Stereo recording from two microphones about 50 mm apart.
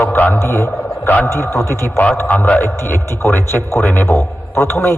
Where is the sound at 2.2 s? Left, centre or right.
Left.